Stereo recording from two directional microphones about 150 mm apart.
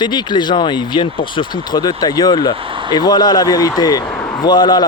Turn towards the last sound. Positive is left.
turn(degrees=30)  # may be behind; listen again after turning